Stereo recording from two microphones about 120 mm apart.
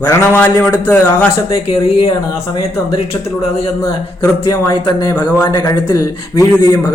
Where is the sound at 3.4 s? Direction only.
55° left (ahead or behind).